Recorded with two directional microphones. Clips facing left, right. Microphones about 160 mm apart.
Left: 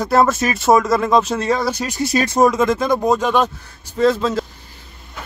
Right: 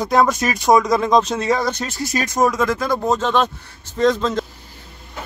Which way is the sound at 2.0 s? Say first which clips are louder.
Left 4 dB; 30° left (ahead or behind).